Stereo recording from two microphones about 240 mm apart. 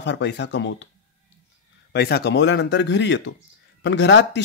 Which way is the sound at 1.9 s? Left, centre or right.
Left.